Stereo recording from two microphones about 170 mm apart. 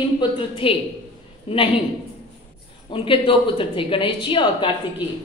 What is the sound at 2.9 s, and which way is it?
Speech, 30° left (ahead or behind).